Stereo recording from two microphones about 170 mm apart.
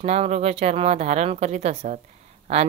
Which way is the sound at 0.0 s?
40° right (ahead or behind).